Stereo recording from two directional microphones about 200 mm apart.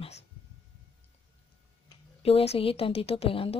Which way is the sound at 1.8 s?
30° left (ahead or behind).